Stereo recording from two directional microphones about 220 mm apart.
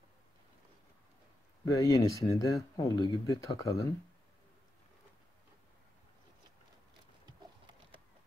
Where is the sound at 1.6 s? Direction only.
15° left (ahead or behind).